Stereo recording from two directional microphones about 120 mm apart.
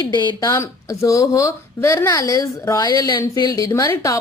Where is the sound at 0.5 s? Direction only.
25° left (ahead or behind).